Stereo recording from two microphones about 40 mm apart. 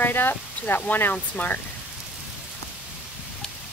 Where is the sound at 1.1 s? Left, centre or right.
Left.